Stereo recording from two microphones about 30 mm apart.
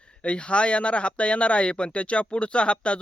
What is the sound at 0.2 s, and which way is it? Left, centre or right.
Speech, left.